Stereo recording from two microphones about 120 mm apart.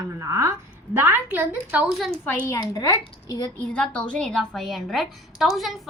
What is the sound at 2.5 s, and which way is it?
Speech, 30° left (ahead or behind).